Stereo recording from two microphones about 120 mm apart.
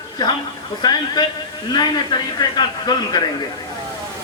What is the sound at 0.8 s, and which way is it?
A man's voice, 35° left (ahead or behind).